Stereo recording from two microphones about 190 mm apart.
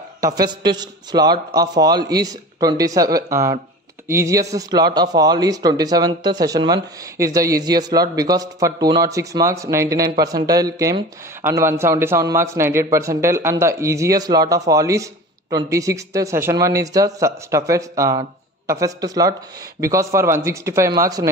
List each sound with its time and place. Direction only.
0.2 s a man's voice: 20° right (ahead or behind)